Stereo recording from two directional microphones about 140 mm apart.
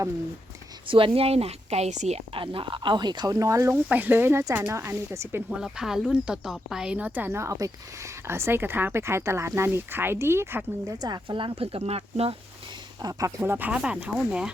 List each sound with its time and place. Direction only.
0.9 s a woman's voice: 40° right (ahead or behind); by 3.8 s 20° right (ahead or behind)
3.8 s speech: 10° right (ahead or behind)
5.5 s speech: 5° right (ahead or behind)
10.9 s a woman's voice: 30° right (ahead or behind); by 12.4 s 45° right (ahead or behind)
13.0 s speech: 25° right (ahead or behind); by 14.5 s 5° right (ahead or behind)